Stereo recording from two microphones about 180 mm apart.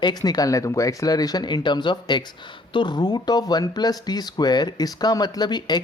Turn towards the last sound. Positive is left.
turn(degrees=25)  # may be behind; listen again after turning